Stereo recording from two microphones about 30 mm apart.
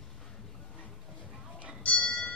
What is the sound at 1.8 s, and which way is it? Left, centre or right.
Music, left.